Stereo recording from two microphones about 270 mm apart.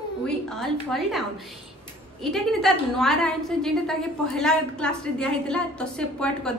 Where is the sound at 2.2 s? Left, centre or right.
Centre.